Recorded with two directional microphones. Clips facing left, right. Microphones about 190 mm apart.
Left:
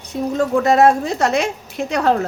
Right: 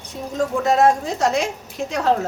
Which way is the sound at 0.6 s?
65° left (ahead or behind).